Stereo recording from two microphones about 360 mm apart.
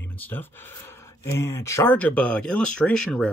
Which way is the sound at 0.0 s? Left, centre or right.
Centre.